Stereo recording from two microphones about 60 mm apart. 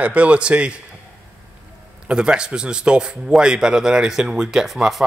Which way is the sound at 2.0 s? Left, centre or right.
Centre.